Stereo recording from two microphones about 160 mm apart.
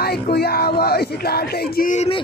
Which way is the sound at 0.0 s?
80° left.